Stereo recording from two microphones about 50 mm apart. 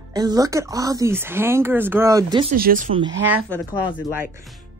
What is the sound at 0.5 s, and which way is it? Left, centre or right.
Speech, right.